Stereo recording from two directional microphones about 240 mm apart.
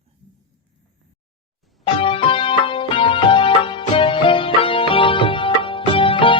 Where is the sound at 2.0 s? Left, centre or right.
Left.